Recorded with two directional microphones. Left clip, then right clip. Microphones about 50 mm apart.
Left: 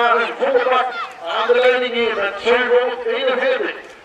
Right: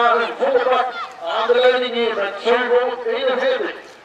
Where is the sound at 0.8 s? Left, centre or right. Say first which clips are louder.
Left 2 dB; left.